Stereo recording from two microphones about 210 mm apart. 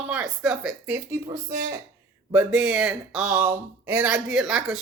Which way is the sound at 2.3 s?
5° right (ahead or behind).